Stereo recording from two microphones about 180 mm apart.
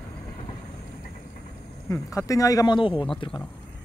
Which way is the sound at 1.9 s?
20° left (ahead or behind).